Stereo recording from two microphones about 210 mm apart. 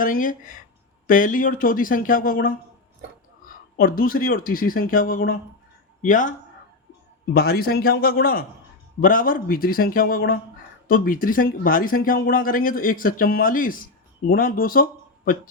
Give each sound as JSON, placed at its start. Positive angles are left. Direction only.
{"t": 0.0, "sound": "speech", "side_deg": 40}
{"t": 3.8, "sound": "speech", "side_deg": 45}
{"t": 7.3, "sound": "speech", "side_deg": 45}